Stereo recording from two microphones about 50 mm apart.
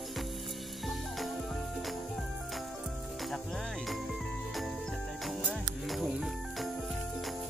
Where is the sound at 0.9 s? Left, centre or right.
Centre.